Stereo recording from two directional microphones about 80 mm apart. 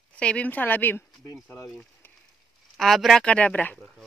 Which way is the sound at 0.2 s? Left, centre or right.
Centre.